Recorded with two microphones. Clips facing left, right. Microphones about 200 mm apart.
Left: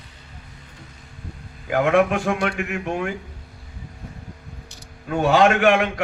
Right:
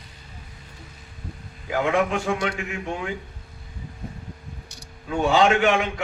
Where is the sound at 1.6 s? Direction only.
55° left (ahead or behind).